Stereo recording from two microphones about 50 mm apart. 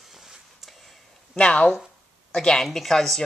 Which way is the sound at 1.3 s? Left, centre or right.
Left.